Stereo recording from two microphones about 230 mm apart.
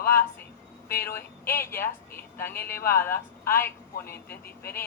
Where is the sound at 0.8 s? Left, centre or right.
Centre.